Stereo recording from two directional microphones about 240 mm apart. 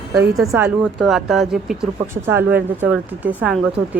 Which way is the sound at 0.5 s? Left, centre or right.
Centre.